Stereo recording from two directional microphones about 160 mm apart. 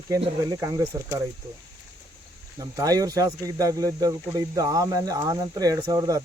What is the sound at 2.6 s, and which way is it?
Speech, 20° right (ahead or behind).